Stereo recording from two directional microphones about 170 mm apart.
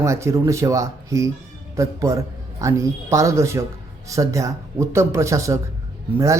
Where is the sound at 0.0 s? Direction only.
15° right (ahead or behind).